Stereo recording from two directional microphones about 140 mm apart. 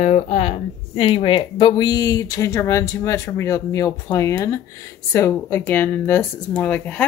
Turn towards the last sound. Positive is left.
turn(degrees=10)  # may be behind; listen again after turning